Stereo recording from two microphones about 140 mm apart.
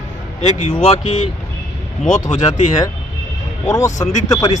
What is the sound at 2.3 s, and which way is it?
Speech, 55° left (ahead or behind).